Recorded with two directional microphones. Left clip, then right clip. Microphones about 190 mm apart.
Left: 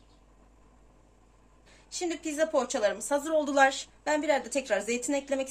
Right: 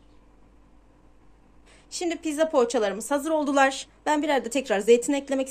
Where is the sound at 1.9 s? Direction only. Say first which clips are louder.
Right 4 dB; 55° right (ahead or behind).